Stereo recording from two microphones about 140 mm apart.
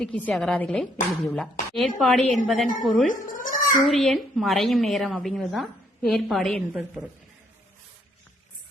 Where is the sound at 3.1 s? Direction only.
70° left (ahead or behind).